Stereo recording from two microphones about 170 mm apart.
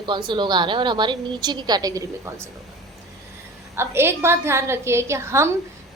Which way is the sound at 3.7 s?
15° right (ahead or behind).